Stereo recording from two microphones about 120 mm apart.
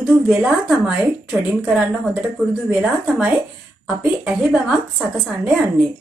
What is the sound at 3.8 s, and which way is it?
A woman's voice, centre (ahead or behind).